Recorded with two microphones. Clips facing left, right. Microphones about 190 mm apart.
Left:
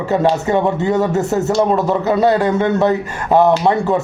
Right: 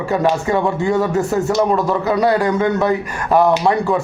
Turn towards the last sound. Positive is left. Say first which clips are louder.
# left 1 dB
turn(degrees=20)  # may be behind; listen again after turning